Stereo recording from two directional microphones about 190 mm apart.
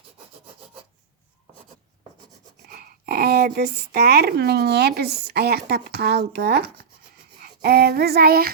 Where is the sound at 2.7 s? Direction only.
55° right (ahead or behind).